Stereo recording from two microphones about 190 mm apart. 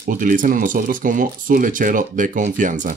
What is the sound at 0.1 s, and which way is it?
Speech, 45° right (ahead or behind).